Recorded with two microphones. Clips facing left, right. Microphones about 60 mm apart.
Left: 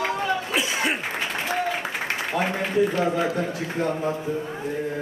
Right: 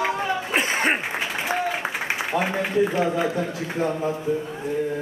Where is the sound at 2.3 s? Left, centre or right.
Centre.